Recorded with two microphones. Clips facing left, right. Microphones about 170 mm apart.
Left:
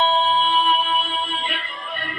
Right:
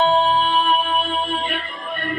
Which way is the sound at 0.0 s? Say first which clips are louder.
Right 3 dB; 50° right (ahead or behind).